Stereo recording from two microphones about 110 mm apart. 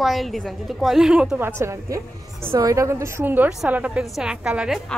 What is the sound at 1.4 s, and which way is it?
A woman's voice, 25° right (ahead or behind).